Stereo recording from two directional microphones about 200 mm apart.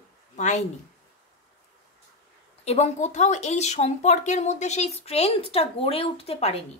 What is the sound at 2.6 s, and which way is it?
A woman's voice, 30° left (ahead or behind).